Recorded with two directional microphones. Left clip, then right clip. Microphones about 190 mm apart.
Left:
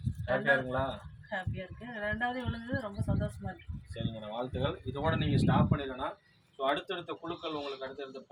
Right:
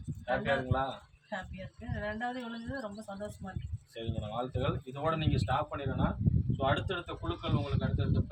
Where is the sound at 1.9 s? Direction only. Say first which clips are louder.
Left 3 dB; 10° left (ahead or behind).